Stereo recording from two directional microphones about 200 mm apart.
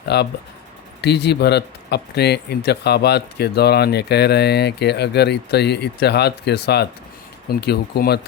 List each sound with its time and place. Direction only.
0.1 s speech: 55° left (ahead or behind)